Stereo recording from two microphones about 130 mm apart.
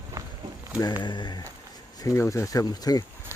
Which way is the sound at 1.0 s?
35° left (ahead or behind).